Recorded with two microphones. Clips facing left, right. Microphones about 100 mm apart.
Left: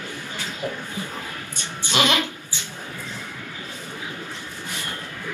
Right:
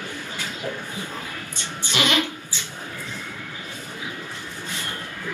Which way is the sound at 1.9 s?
15° left (ahead or behind).